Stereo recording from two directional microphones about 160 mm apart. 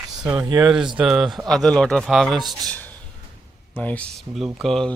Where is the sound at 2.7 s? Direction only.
10° left (ahead or behind).